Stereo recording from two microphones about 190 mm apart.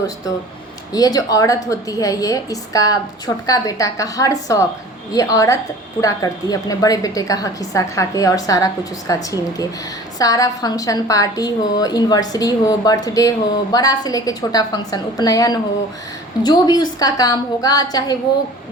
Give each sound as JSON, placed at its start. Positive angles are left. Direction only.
{"t": 0.9, "sound": "a woman's voice", "side_deg": 20}